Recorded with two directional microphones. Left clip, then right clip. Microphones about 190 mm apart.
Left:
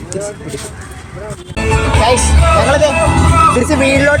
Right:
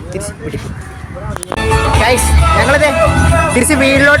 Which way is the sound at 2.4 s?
20° right (ahead or behind).